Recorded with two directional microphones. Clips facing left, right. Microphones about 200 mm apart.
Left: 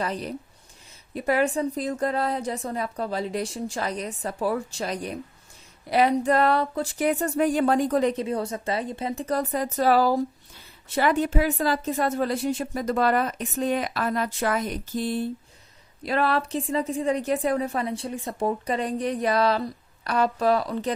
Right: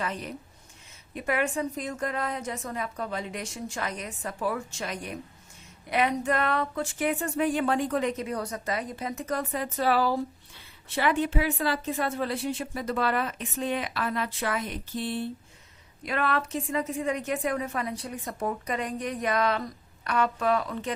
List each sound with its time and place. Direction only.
0.0 s a woman's voice: 35° left (ahead or behind)